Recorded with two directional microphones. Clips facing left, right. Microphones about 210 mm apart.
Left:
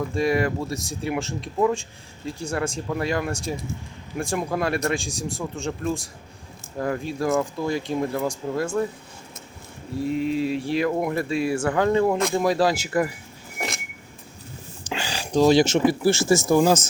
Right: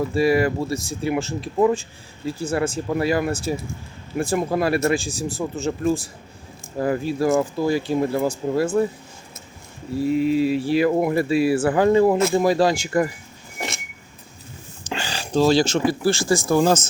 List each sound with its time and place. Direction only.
0.1 s speech: 5° right (ahead or behind)
10.0 s speech: 5° right (ahead or behind)
14.8 s a sound: 10° left (ahead or behind)
15.9 s speech: 25° left (ahead or behind)
16.6 s speech: 10° left (ahead or behind)